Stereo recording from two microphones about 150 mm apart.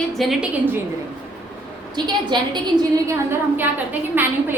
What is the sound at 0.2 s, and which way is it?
Speech, centre (ahead or behind).